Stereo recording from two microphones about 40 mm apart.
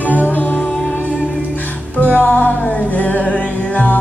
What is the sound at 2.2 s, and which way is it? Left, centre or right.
Music, left.